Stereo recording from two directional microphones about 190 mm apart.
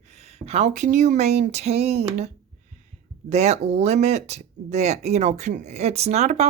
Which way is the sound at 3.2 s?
35° right (ahead or behind).